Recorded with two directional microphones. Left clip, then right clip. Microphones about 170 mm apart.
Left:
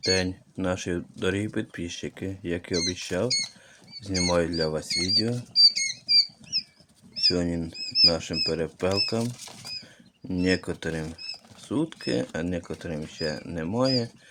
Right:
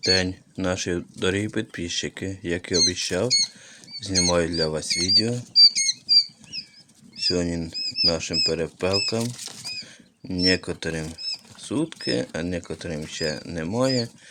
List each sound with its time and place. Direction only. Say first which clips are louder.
0.1 s speech: right 4 dB; 15° right (ahead or behind)
5.7 s rodents: right 3 dB; 15° right (ahead or behind)
7.2 s speech: even; 10° right (ahead or behind)